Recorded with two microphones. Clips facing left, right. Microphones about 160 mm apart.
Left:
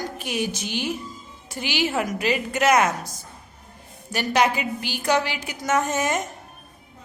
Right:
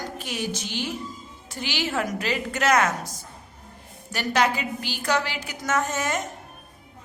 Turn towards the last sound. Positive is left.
turn(degrees=15)  # may be behind; listen again after turning